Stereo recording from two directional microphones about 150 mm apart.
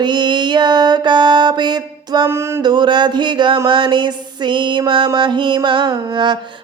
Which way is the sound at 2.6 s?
30° right (ahead or behind).